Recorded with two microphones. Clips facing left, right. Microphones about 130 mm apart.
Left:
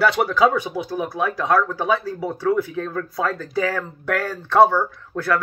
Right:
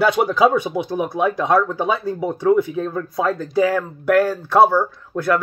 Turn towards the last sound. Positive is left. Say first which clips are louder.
# right 3 dB
turn(degrees=-15)  # may be behind; listen again after turning